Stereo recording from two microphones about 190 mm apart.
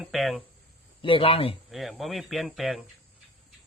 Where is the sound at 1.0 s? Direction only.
30° left (ahead or behind).